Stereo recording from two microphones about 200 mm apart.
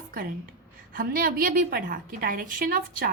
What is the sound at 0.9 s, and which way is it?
A woman's voice, 45° right (ahead or behind).